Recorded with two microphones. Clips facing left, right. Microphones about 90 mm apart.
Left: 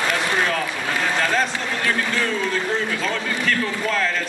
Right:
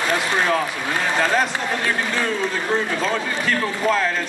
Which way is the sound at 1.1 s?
20° right (ahead or behind).